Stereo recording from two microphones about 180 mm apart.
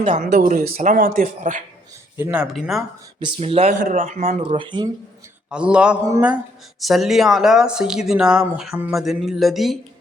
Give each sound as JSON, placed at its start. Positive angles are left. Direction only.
{"t": 0.4, "sound": "speech", "side_deg": -45}
{"t": 2.1, "sound": "speech", "side_deg": -10}
{"t": 3.2, "sound": "speech", "side_deg": -30}
{"t": 4.5, "sound": "speech", "side_deg": -25}
{"t": 5.5, "sound": "speech", "side_deg": -5}
{"t": 6.0, "sound": "speech", "side_deg": -15}